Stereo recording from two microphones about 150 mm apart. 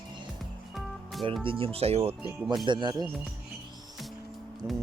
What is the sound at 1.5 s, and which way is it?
Speech, 40° right (ahead or behind).